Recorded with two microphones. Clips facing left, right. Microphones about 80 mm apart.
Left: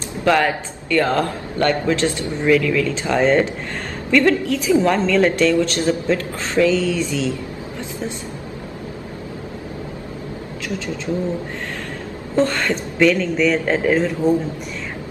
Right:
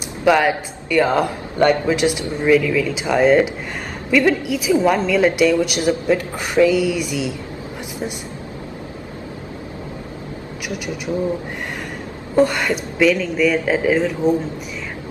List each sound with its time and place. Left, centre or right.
0.2 s a man's voice: centre
12.4 s a man's voice: centre